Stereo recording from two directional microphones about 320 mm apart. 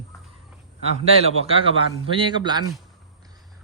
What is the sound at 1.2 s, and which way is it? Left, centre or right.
Speech, centre.